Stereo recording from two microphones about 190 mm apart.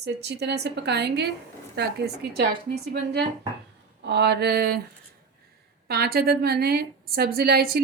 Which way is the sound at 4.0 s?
65° right (ahead or behind).